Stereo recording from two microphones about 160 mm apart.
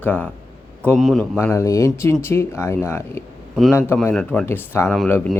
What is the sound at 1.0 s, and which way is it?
Speech, centre (ahead or behind).